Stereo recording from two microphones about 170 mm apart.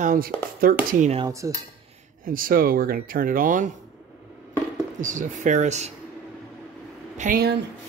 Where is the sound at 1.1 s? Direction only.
20° right (ahead or behind).